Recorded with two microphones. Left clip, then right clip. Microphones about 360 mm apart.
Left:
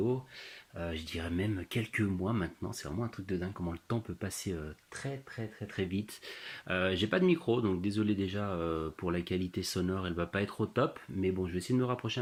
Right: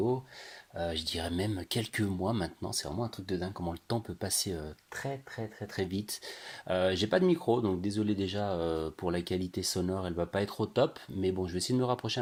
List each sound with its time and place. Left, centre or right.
1.1 s speech: right
5.7 s speech: right